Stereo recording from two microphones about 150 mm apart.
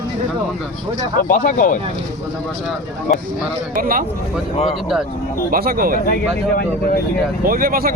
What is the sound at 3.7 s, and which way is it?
Speech, 70° right (ahead or behind).